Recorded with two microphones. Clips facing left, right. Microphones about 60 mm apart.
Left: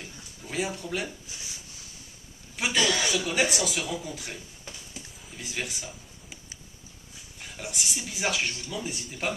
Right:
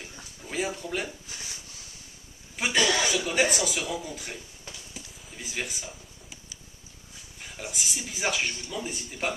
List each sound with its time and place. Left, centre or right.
0.0 s a sound: centre
2.7 s speech: right
3.0 s speech: centre
5.4 s speech: centre
7.3 s speech: centre